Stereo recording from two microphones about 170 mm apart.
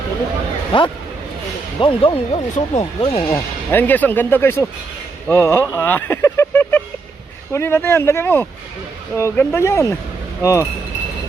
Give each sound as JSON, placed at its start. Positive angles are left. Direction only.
{"t": 0.7, "sound": "speech", "side_deg": 30}
{"t": 3.3, "sound": "speech", "side_deg": 10}